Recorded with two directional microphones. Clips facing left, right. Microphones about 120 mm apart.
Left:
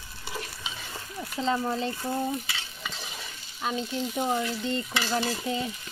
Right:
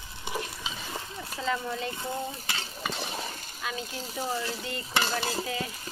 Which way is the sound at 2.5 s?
40° right (ahead or behind).